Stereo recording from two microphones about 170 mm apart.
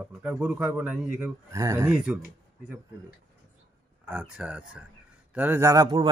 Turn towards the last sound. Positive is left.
turn(degrees=-25)  # may be behind; listen again after turning